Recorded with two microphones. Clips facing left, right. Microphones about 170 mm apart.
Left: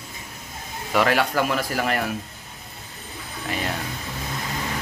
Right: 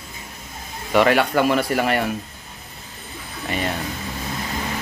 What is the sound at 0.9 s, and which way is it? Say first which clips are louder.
Speech: right 4 dB; centre (ahead or behind).